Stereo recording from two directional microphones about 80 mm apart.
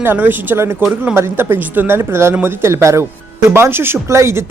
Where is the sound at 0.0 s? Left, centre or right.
Right.